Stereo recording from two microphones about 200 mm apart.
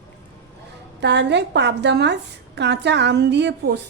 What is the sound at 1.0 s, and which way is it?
A woman's voice, 60° right (ahead or behind).